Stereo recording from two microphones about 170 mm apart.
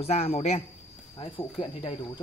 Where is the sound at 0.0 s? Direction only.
35° left (ahead or behind).